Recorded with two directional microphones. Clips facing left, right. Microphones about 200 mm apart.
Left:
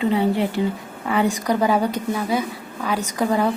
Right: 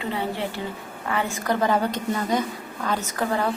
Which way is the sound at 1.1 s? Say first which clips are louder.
Left 5 dB; 15° left (ahead or behind).